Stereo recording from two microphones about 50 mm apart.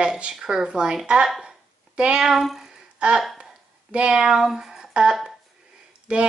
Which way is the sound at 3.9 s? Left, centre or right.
Centre.